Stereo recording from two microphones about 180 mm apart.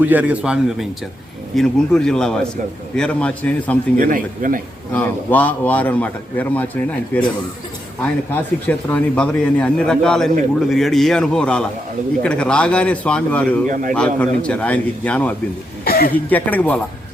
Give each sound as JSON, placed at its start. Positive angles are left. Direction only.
{"t": 0.0, "sound": "a man's voice", "side_deg": -10}
{"t": 3.9, "sound": "a man's voice", "side_deg": -50}
{"t": 4.9, "sound": "a man's voice", "side_deg": 10}
{"t": 15.8, "sound": "a sound", "side_deg": 55}
{"t": 16.1, "sound": "a man's voice", "side_deg": 10}